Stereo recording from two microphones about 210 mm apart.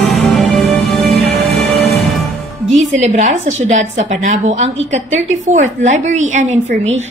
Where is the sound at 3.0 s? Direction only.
35° right (ahead or behind).